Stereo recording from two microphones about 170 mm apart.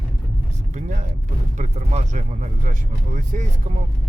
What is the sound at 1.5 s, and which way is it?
Speech, 40° right (ahead or behind).